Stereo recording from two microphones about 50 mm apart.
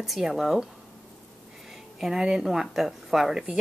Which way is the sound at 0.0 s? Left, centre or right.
Centre.